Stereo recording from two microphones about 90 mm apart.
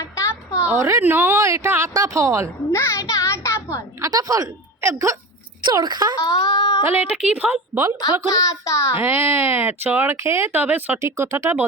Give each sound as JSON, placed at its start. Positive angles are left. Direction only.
{"t": 0.0, "sound": "music", "side_deg": 35}
{"t": 0.8, "sound": "a woman's voice", "side_deg": -35}
{"t": 1.0, "sound": "speech", "side_deg": -20}
{"t": 1.4, "sound": "a woman's voice", "side_deg": -35}
{"t": 2.7, "sound": "child singing", "side_deg": 30}
{"t": 3.1, "sound": "a sound", "side_deg": 35}
{"t": 4.0, "sound": "a woman's voice", "side_deg": -40}
{"t": 5.6, "sound": "speech", "side_deg": -50}
{"t": 6.3, "sound": "speech", "side_deg": 50}
{"t": 6.8, "sound": "a woman's voice", "side_deg": -25}
{"t": 8.0, "sound": "child singing", "side_deg": 40}
{"t": 9.0, "sound": "speech", "side_deg": -25}
{"t": 11.0, "sound": "a woman's voice", "side_deg": -35}